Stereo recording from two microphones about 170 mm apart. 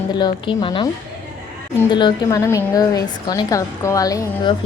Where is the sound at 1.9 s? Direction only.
20° left (ahead or behind).